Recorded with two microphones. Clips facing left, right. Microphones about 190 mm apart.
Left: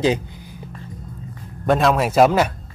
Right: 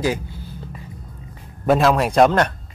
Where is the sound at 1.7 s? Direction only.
Centre (ahead or behind).